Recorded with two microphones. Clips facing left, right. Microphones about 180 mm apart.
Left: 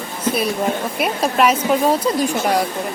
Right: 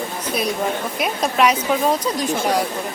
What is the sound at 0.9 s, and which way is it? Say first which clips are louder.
Speech: left 1 dB; 5° left (ahead or behind).